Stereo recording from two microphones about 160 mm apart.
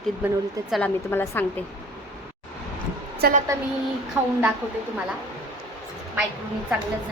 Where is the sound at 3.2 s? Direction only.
70° right (ahead or behind).